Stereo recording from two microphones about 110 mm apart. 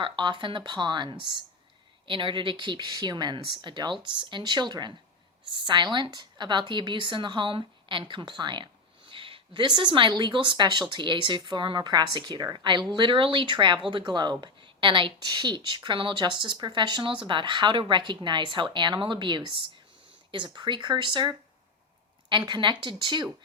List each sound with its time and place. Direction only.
0.0 s speech: 45° right (ahead or behind)